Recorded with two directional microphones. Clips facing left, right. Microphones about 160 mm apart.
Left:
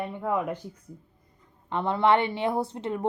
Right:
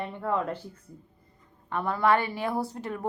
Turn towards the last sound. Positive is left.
turn(degrees=20)  # may be behind; listen again after turning